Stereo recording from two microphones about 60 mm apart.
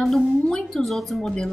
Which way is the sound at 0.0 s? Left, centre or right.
Centre.